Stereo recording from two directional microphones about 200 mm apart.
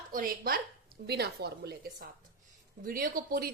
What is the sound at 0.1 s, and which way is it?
A woman's voice, 45° right (ahead or behind).